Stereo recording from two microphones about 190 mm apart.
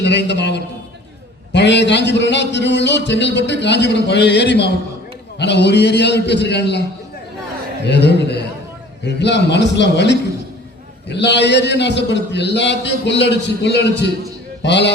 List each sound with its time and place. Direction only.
0.0 s a man's voice: 65° left (ahead or behind)
7.9 s a man's voice: 65° left (ahead or behind)